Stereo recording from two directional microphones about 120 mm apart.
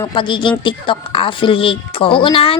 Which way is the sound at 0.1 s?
40° left (ahead or behind).